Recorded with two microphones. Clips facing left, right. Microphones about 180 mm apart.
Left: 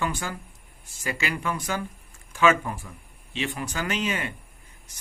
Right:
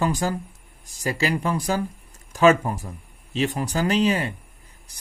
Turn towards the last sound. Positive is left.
turn(degrees=-35)  # may be behind; listen again after turning